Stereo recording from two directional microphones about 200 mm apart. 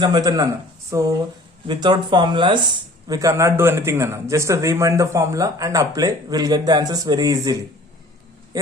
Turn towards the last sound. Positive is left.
turn(degrees=-20)  # may be behind; listen again after turning